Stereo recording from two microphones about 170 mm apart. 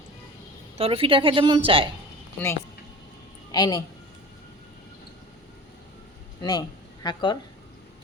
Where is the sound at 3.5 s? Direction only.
25° left (ahead or behind).